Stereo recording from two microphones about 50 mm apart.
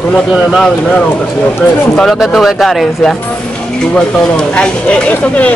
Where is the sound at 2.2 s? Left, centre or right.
Centre.